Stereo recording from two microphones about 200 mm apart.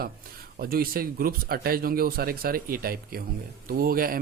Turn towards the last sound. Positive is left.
turn(degrees=-45)  # may be behind; listen again after turning